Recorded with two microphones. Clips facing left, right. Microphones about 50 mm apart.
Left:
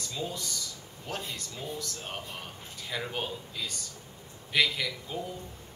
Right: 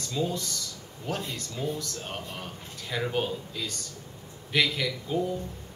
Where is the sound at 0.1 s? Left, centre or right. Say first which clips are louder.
Right 7 dB; centre.